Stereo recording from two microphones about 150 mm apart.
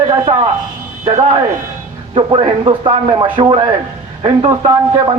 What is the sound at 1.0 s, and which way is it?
Speech, 45° right (ahead or behind).